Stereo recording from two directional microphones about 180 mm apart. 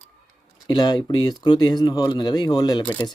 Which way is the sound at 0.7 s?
25° left (ahead or behind).